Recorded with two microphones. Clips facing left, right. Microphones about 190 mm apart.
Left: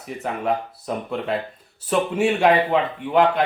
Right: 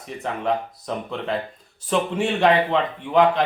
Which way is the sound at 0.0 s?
5° left (ahead or behind).